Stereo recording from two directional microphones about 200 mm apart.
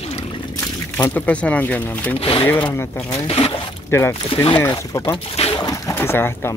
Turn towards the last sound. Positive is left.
turn(degrees=10)  # may be behind; listen again after turning